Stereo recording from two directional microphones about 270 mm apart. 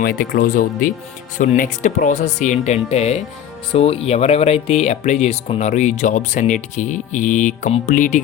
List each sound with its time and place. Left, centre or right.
0.0 s speech: left